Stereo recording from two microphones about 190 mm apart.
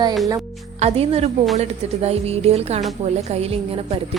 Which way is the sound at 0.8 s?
35° right (ahead or behind).